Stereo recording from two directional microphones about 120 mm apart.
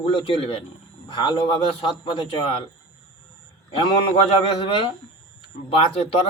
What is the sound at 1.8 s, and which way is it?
Speech, 45° left (ahead or behind).